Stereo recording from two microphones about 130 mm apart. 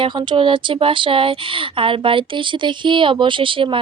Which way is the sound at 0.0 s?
40° right (ahead or behind).